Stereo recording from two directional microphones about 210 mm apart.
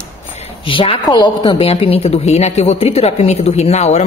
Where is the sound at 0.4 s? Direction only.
25° left (ahead or behind).